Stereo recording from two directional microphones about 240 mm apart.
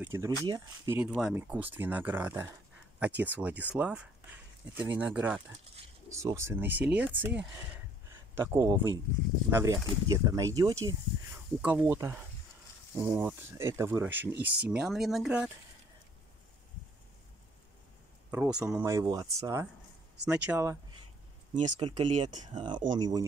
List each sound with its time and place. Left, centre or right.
0.0 s speech: centre
18.3 s speech: centre
21.7 s speech: centre